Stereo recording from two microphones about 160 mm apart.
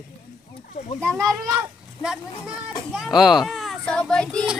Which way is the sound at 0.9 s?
5° left (ahead or behind).